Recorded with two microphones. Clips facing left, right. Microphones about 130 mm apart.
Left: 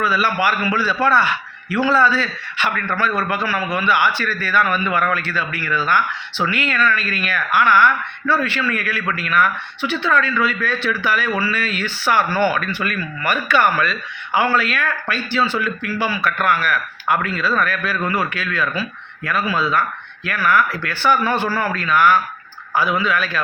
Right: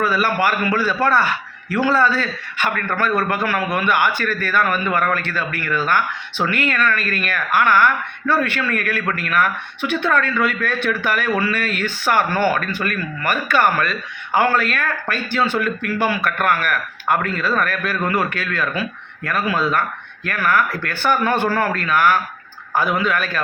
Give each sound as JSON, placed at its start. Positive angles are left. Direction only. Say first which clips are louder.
{"t": 0.0, "sound": "speech", "louder": "even", "side_deg": -45}